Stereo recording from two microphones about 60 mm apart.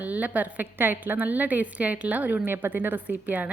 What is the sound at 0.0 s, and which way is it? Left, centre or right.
A woman's voice, right.